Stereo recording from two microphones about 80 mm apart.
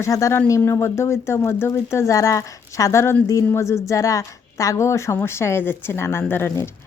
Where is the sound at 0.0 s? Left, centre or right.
Left.